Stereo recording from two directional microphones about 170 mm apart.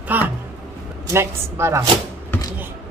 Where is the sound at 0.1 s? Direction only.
10° right (ahead or behind).